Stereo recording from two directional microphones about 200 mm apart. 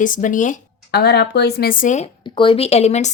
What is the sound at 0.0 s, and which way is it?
A woman's voice, 40° left (ahead or behind).